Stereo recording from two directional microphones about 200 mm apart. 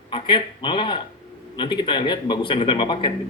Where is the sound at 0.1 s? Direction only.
25° left (ahead or behind).